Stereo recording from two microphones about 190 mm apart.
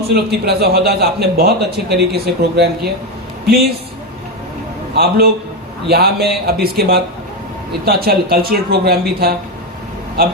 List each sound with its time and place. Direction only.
0.1 s a man's voice: 60° right (ahead or behind)
4.9 s speech: 55° right (ahead or behind)